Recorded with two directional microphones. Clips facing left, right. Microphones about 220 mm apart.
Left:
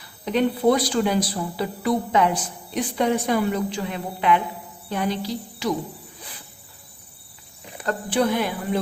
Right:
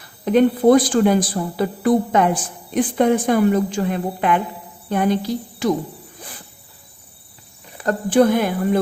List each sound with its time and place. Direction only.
0.0 s a woman's voice: 50° right (ahead or behind)
7.9 s a woman's voice: 45° right (ahead or behind)